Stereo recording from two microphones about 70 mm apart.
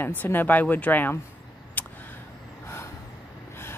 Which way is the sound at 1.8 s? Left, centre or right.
Left.